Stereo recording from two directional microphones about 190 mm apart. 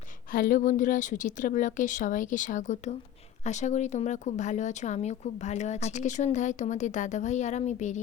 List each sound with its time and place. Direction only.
0.3 s a woman's voice: 45° left (ahead or behind)